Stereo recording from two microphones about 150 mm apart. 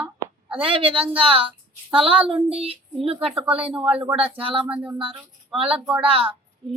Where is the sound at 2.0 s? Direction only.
40° right (ahead or behind).